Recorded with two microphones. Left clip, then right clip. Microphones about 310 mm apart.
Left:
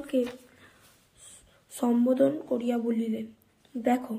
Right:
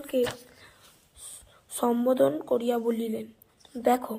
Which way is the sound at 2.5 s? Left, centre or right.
Centre.